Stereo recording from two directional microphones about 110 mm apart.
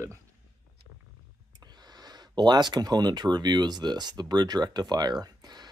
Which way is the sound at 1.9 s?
35° right (ahead or behind).